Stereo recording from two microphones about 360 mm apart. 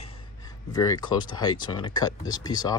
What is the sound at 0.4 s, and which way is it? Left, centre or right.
Speech, centre.